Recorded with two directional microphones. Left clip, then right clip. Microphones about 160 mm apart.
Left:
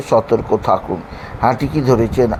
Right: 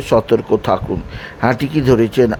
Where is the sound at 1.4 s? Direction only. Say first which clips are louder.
Left 1 dB; 65° right (ahead or behind).